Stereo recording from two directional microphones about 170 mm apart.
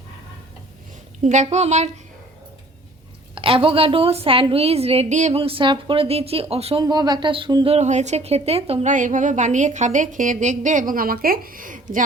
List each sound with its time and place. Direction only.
1.2 s a woman's voice: 45° right (ahead or behind)
3.3 s a woman's voice: 30° right (ahead or behind)
6.8 s a woman's voice: 25° right (ahead or behind); by 12.0 s 50° right (ahead or behind)